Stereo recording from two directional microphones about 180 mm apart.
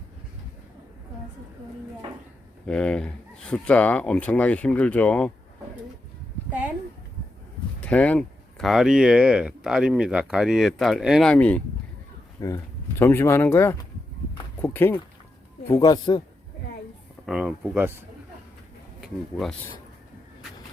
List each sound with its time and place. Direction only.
2.6 s speech: 5° left (ahead or behind)
7.8 s speech: 10° left (ahead or behind)
12.4 s speech: 20° left (ahead or behind)
17.2 s speech: 5° right (ahead or behind)
18.9 s speech: centre (ahead or behind)